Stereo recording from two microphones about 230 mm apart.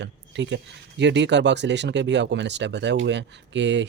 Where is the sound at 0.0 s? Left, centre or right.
Right.